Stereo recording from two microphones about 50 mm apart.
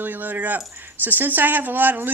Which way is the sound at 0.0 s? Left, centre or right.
Right.